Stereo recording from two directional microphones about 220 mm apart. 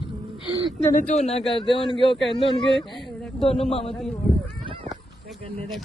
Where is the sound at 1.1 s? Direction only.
30° left (ahead or behind).